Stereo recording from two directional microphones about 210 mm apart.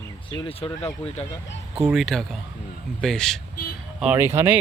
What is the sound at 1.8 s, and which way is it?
Speech, 5° right (ahead or behind).